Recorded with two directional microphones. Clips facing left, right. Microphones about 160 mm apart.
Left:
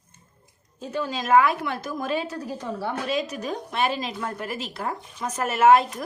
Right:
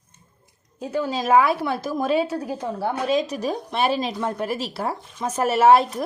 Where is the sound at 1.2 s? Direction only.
35° right (ahead or behind).